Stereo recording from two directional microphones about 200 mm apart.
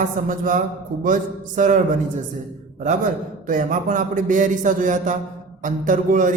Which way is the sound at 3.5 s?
40° right (ahead or behind).